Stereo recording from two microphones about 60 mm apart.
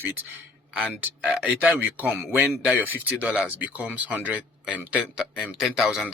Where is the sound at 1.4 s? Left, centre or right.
Right.